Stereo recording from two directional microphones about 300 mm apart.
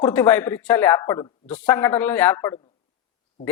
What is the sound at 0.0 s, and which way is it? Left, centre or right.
A man's voice, centre.